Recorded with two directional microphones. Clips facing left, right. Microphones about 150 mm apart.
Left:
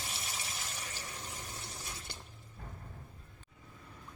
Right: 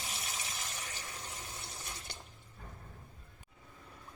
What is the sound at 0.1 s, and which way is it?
Water, centre (ahead or behind).